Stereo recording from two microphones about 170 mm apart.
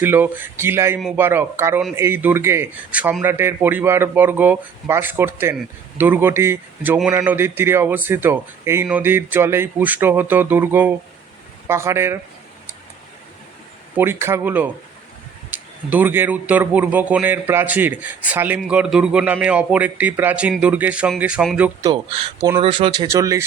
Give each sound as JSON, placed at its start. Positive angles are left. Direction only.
{"t": 0.0, "sound": "a man's voice", "side_deg": -10}
{"t": 0.9, "sound": "a man's voice", "side_deg": -5}
{"t": 13.9, "sound": "a man's voice", "side_deg": -15}
{"t": 21.8, "sound": "speech", "side_deg": -20}